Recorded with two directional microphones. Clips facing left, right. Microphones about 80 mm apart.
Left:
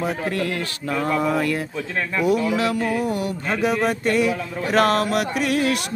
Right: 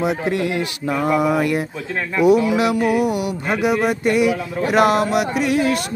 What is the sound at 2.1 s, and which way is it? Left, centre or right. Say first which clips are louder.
Speech: right 6 dB; centre.